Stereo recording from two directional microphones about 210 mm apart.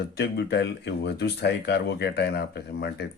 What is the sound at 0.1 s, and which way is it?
Speech, 50° left (ahead or behind).